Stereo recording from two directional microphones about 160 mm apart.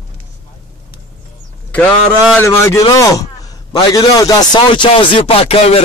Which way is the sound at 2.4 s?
15° left (ahead or behind).